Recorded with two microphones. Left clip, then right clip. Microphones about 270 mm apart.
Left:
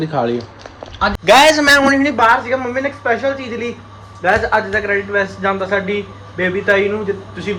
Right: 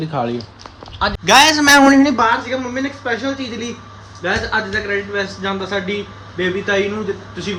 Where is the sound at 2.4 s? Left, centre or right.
Centre.